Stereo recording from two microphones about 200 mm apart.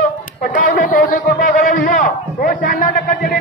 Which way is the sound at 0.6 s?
45° left (ahead or behind).